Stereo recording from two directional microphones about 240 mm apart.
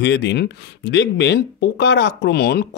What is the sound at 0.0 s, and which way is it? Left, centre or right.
Speech, left.